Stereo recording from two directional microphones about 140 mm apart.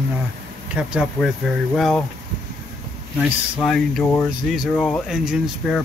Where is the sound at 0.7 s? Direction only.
5° right (ahead or behind).